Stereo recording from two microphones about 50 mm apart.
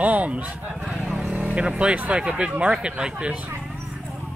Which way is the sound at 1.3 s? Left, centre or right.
Right.